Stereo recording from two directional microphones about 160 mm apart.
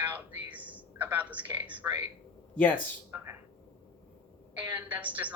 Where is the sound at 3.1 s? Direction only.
15° right (ahead or behind).